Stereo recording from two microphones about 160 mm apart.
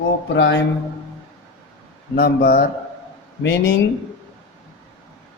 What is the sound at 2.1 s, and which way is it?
Speech, 80° left.